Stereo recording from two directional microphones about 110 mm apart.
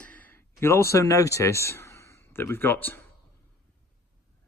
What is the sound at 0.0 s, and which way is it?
Speech, 15° left (ahead or behind).